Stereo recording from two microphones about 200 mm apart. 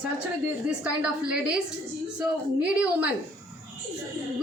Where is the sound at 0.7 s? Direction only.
5° right (ahead or behind).